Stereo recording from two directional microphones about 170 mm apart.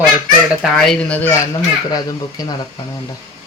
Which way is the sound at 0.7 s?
Centre (ahead or behind).